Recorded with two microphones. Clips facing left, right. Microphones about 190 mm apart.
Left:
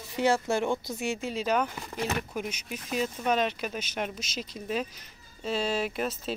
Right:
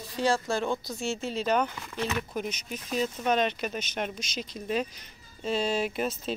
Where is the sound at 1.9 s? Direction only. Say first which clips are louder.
Even; 45° left (ahead or behind).